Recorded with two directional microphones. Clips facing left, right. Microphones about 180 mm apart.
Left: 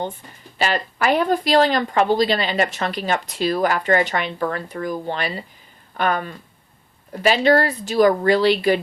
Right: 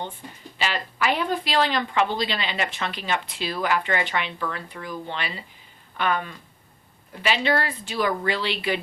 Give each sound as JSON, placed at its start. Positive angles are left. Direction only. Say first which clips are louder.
{"t": 0.6, "sound": "speech", "louder": "left 5 dB", "side_deg": 45}